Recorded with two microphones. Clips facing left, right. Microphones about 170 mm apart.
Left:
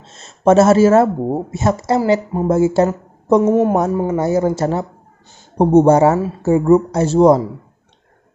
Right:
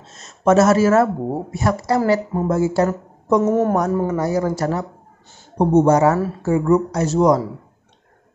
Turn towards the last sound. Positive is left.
turn(degrees=30)  # may be behind; listen again after turning